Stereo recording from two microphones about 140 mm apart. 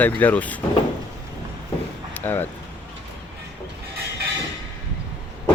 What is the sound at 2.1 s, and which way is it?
Speech, 15° left (ahead or behind).